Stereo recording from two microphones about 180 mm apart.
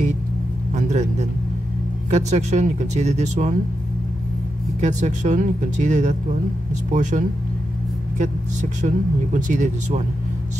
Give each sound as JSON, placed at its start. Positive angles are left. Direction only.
{"t": 2.0, "sound": "speech", "side_deg": -40}
{"t": 4.7, "sound": "speech", "side_deg": -40}